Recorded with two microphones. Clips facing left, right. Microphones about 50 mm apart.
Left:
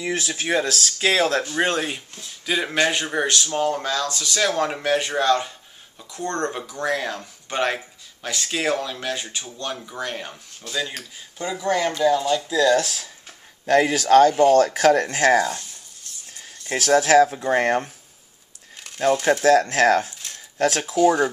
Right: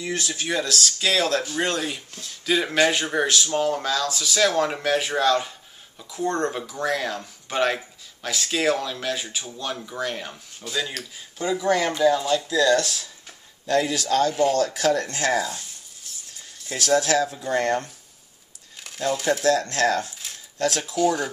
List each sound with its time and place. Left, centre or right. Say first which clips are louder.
0.0 s speech: left 2 dB; left
2.1 s speech: right 2 dB; centre
13.7 s speech: left 5 dB; left
16.1 s a sound: even; centre
16.7 s speech: left 5 dB; left
18.9 s crumpling: right 1 dB; centre
19.3 s speech: left 4 dB; left
20.5 s speech: left 3 dB; left
20.9 s speech: left 6 dB; centre